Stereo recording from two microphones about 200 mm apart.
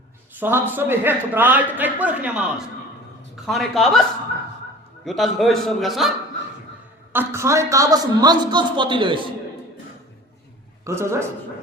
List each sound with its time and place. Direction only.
0.3 s a man's voice: 10° right (ahead or behind)
3.4 s a man's voice: centre (ahead or behind)
5.0 s a man's voice: centre (ahead or behind)
7.1 s a man's voice: 10° right (ahead or behind)
10.8 s a man's voice: 15° right (ahead or behind)